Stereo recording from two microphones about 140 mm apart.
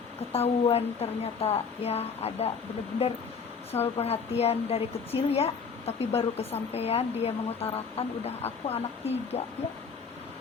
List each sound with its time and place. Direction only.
0.3 s a woman's voice: 45° left (ahead or behind)
3.7 s a woman's voice: 45° left (ahead or behind)